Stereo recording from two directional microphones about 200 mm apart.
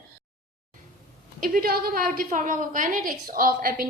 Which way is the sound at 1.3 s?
45° right (ahead or behind).